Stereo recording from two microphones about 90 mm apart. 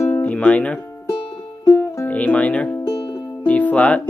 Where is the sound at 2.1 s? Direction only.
15° left (ahead or behind).